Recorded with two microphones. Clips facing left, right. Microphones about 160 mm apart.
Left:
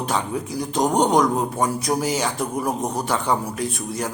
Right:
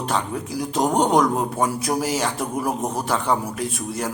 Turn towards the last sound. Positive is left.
turn(degrees=-5)  # may be behind; listen again after turning